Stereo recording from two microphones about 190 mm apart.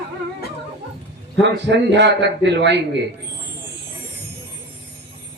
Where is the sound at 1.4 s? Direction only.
65° right (ahead or behind).